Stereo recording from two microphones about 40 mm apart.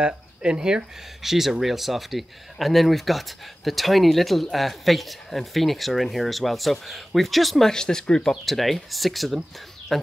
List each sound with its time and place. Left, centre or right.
0.0 s speech: right
1.2 s speech: centre
7.7 s speech: centre
8.5 s speech: centre